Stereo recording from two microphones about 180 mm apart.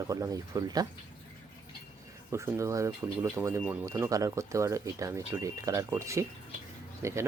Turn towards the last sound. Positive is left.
turn(degrees=-15)  # may be behind; listen again after turning